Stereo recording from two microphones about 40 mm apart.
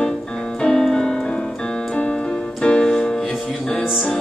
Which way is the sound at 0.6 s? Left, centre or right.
Centre.